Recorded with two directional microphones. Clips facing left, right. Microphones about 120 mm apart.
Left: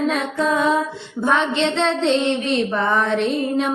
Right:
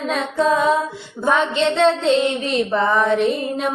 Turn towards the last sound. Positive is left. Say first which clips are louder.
# even
turn(degrees=-5)  # may be behind; listen again after turning